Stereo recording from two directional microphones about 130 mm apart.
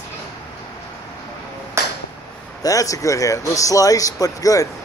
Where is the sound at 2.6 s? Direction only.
25° left (ahead or behind).